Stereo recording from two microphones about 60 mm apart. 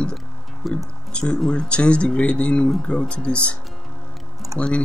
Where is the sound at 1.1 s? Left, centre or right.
Centre.